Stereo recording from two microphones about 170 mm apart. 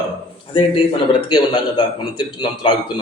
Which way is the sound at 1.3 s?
25° left (ahead or behind).